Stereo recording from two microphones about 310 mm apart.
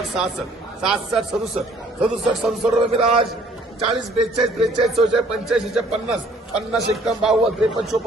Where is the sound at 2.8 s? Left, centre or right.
Centre.